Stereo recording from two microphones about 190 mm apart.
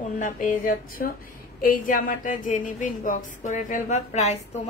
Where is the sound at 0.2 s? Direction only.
45° left (ahead or behind).